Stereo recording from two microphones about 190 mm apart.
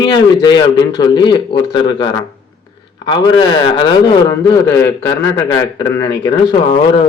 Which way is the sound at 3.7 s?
20° left (ahead or behind).